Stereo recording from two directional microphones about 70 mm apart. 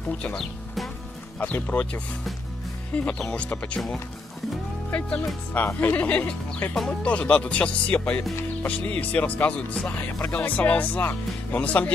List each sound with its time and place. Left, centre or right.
1.4 s speech: left
4.9 s speech: centre
5.5 s speech: left
5.9 s speech: centre
6.8 s speech: centre; by 11.9 s left